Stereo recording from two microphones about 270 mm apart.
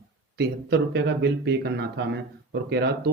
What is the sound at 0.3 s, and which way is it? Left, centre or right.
Speech, right.